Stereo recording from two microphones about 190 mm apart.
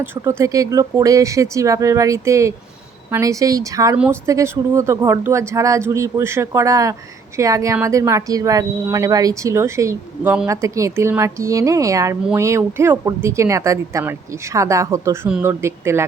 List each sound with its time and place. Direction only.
0.0 s speech: 15° right (ahead or behind)